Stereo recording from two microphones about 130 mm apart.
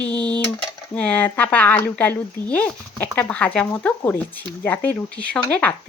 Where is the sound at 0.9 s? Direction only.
10° left (ahead or behind).